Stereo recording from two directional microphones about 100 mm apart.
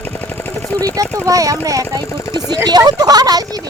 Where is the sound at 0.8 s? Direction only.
35° right (ahead or behind).